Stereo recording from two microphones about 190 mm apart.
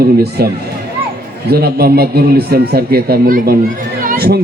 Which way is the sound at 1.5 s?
55° right (ahead or behind).